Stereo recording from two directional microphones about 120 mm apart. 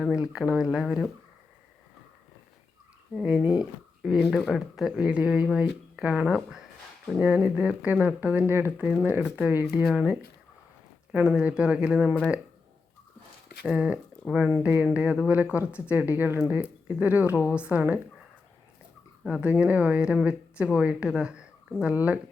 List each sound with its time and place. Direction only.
0.0 s speech: 5° right (ahead or behind)
3.2 s speech: 10° right (ahead or behind)
13.7 s speech: 10° right (ahead or behind)
19.2 s speech: 10° right (ahead or behind)